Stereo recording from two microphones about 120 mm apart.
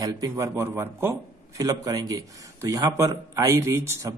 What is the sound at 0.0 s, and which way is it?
A man's voice, 30° right (ahead or behind).